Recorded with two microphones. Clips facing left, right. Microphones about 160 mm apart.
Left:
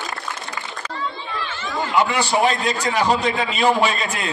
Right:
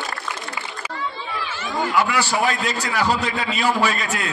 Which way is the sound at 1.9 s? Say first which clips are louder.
Left 3 dB; 25° left (ahead or behind).